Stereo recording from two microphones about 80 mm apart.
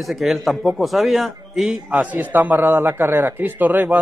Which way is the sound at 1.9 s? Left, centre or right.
Centre.